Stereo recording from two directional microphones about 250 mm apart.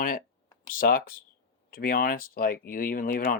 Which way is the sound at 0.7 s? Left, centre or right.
Left.